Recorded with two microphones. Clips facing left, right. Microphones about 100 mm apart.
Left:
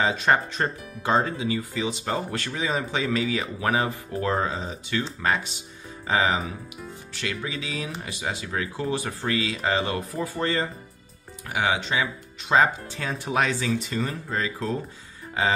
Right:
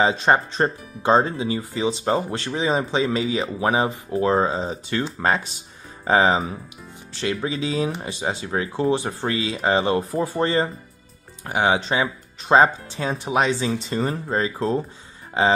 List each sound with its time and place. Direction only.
0.0 s speech: 25° right (ahead or behind)